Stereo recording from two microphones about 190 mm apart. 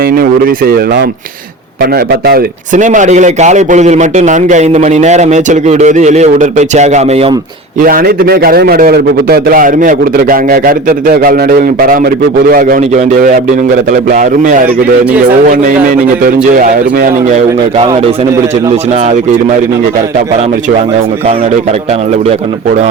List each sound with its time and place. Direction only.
0.0 s a man's voice: 50° right (ahead or behind)
2.0 s a man's voice: 55° right (ahead or behind); by 7.3 s 35° right (ahead or behind)
7.8 s a man's voice: 50° right (ahead or behind)
17.7 s speech: 30° right (ahead or behind)